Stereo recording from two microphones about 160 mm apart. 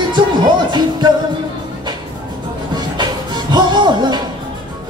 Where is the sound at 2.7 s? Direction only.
25° right (ahead or behind).